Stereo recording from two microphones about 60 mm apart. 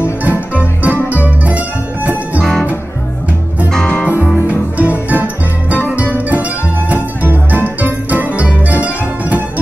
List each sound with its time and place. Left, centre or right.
0.2 s music: right
4.7 s music: right